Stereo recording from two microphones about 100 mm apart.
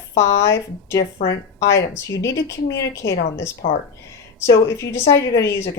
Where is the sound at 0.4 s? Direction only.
30° left (ahead or behind).